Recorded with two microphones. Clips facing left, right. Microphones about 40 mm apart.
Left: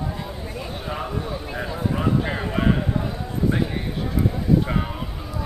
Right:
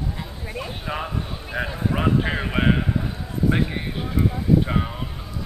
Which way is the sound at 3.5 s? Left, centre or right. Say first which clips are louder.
Right 1 dB; right.